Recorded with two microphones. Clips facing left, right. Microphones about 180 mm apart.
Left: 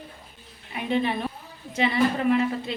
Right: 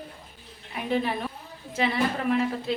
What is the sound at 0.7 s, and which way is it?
A woman's voice, centre (ahead or behind).